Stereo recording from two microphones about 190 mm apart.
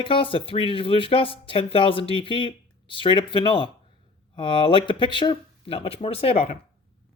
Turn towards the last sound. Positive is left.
turn(degrees=30)  # may be behind; listen again after turning